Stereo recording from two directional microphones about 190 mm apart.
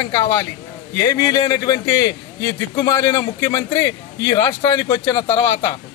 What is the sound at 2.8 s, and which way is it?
A man's voice, 20° left (ahead or behind).